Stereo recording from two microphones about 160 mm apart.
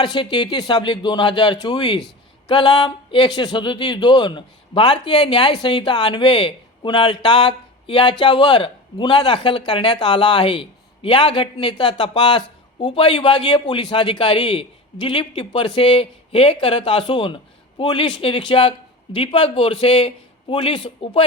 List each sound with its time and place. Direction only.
0.0 s a man's voice: 30° left (ahead or behind)